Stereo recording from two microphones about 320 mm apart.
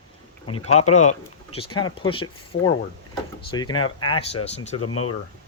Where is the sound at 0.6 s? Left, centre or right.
Left.